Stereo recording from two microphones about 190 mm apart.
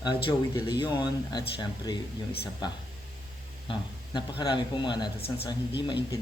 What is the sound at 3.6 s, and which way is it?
Speech, 25° left (ahead or behind).